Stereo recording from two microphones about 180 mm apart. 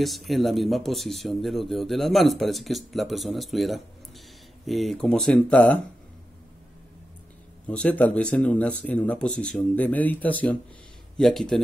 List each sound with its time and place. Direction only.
0.0 s speech: centre (ahead or behind)
7.6 s speech: 5° left (ahead or behind)